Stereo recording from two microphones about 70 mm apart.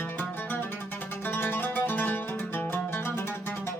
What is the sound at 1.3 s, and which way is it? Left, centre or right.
Music, left.